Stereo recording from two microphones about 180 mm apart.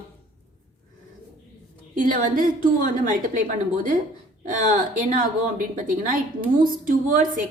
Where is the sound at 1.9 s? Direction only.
50° right (ahead or behind).